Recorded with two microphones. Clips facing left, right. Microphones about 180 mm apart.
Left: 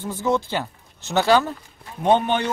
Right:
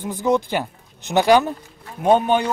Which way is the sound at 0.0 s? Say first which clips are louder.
Right 3 dB; 15° right (ahead or behind).